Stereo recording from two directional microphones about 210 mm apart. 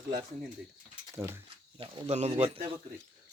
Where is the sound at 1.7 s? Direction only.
30° right (ahead or behind).